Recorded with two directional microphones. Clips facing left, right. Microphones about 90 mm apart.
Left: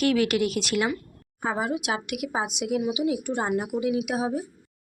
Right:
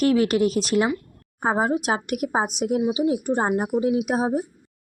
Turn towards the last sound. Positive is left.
turn(degrees=-35)  # may be behind; listen again after turning